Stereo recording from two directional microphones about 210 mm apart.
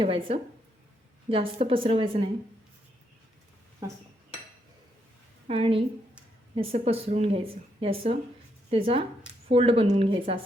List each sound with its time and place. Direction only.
0.0 s speech: 25° right (ahead or behind)
5.5 s speech: 25° right (ahead or behind)